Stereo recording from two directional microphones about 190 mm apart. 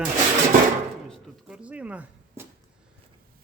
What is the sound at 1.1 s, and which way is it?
Speech, 5° right (ahead or behind).